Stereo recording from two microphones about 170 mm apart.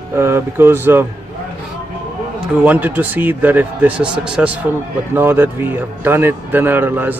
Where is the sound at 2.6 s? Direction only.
10° right (ahead or behind).